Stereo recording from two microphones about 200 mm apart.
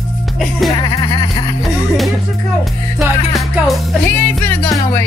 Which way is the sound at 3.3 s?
5° left (ahead or behind).